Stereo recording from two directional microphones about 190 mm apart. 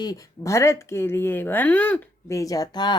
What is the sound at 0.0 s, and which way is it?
Speech, 20° left (ahead or behind).